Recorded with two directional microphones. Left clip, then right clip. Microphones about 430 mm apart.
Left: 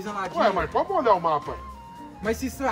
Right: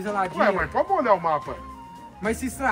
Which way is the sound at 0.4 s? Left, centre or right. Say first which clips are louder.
Left 1 dB; centre.